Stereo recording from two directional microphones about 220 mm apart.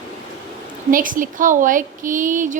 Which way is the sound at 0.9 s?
40° right (ahead or behind).